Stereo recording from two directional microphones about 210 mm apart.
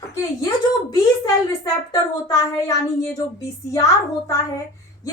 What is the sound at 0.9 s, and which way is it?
A woman's voice, 20° left (ahead or behind).